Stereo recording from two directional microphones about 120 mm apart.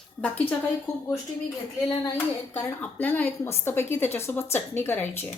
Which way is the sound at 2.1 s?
15° left (ahead or behind).